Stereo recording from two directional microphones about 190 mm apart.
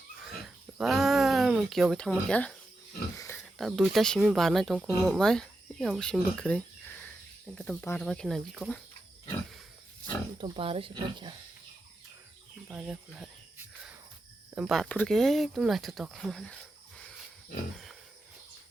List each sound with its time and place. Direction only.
0.2 s a sound: centre (ahead or behind)
3.3 s speech: centre (ahead or behind)
10.3 s speech: 25° right (ahead or behind)
12.6 s speech: 5° right (ahead or behind)
14.5 s speech: centre (ahead or behind)